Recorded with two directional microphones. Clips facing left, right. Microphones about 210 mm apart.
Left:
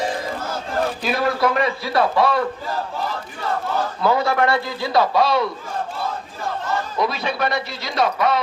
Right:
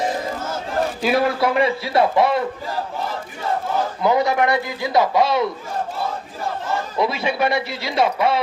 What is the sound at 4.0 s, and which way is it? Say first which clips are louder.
A man's voice: right 1 dB; 20° right (ahead or behind).